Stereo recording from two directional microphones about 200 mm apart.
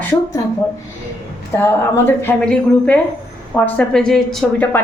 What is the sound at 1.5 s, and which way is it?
A woman's voice, 15° left (ahead or behind).